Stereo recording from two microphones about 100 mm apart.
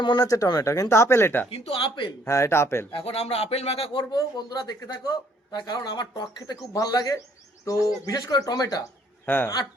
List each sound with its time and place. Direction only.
0.0 s speech: 50° left (ahead or behind)
0.3 s speech: 35° left (ahead or behind)
1.5 s speech: 85° left; by 2.0 s 60° left (ahead or behind)
2.2 s speech: 25° left (ahead or behind)
2.9 s speech: 75° left (ahead or behind)
3.9 s speech: 45° left (ahead or behind)
9.2 s speech: 20° left (ahead or behind)